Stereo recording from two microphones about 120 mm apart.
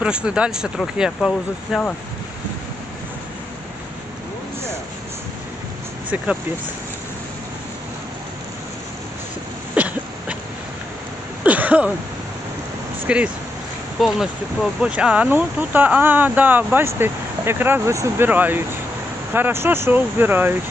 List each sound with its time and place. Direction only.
0.0 s speech: 10° right (ahead or behind)
9.7 s cough: 10° right (ahead or behind)
11.4 s a sound: 10° right (ahead or behind)
13.1 s speech: 10° right (ahead or behind)